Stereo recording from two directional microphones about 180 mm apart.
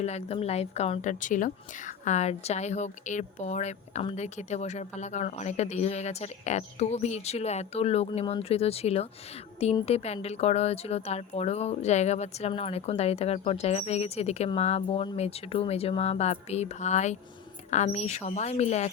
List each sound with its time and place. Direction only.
0.0 s a woman's voice: 35° left (ahead or behind)